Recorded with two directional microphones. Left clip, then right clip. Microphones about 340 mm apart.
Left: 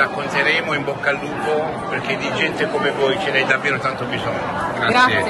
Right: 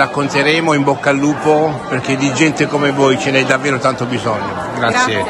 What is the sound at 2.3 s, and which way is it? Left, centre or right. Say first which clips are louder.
Speech: right 5 dB; centre.